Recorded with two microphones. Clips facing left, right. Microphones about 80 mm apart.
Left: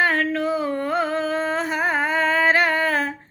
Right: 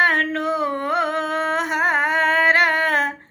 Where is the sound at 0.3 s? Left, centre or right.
Right.